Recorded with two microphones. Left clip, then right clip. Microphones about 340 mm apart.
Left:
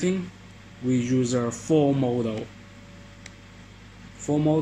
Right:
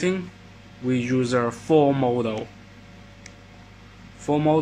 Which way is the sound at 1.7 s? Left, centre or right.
Right.